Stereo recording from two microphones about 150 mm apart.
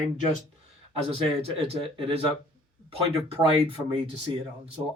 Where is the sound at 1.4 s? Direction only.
40° right (ahead or behind).